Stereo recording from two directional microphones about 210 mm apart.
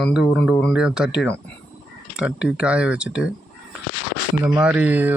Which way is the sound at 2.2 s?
5° right (ahead or behind).